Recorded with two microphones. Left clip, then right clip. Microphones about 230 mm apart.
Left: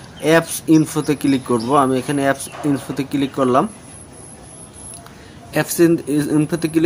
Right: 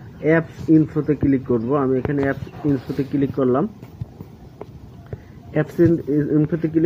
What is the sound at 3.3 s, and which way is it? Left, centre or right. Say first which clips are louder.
Speech: left 5 dB; centre.